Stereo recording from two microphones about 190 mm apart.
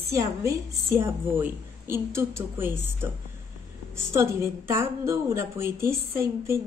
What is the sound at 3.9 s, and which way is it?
A woman's voice, 15° right (ahead or behind).